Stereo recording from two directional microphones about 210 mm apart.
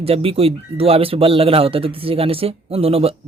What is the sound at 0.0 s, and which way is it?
Speech, 30° right (ahead or behind).